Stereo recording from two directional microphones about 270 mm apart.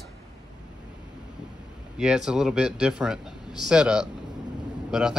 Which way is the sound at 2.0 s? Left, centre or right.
Centre.